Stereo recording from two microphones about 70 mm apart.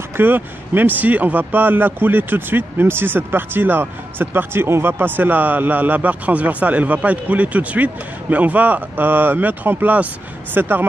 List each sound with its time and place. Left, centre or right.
0.2 s speech: right